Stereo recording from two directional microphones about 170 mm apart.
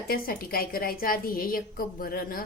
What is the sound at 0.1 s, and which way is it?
A woman's voice, 60° left (ahead or behind).